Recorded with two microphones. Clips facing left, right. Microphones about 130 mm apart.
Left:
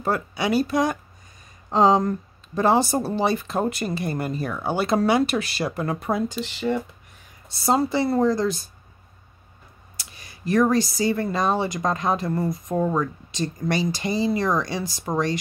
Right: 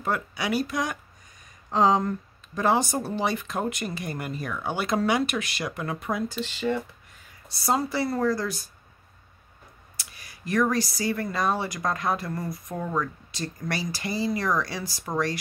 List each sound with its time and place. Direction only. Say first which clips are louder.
0.0 s speech: left 4 dB; 30° left (ahead or behind)
6.2 s speech: left 2 dB; 15° left (ahead or behind)
7.6 s speech: left 5 dB; 25° left (ahead or behind)
9.9 s speech: left 3 dB; 25° left (ahead or behind)